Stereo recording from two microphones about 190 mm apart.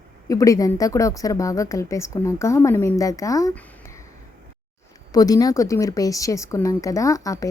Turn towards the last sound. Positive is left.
turn(degrees=15)  # may be behind; listen again after turning